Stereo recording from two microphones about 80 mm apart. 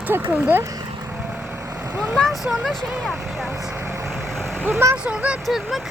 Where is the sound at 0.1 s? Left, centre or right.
Right.